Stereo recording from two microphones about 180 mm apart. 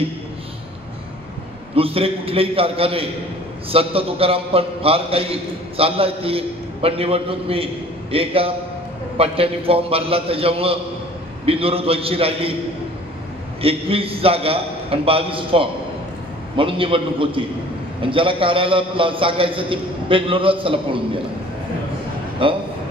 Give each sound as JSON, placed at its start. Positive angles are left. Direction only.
{"t": 1.8, "sound": "a man's voice", "side_deg": -30}
{"t": 13.6, "sound": "a man's voice", "side_deg": -30}
{"t": 22.4, "sound": "a man's voice", "side_deg": -30}